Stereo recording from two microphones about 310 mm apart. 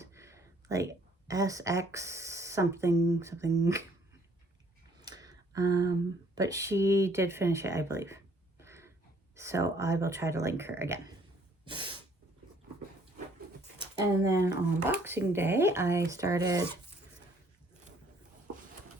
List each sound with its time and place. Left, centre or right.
0.0 s a sound: centre
1.3 s speech: centre
5.0 s speech: centre
11.6 s snort: centre
14.3 s speech: centre